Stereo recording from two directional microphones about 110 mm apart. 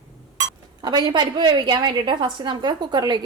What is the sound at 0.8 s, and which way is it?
Speech, 45° right (ahead or behind).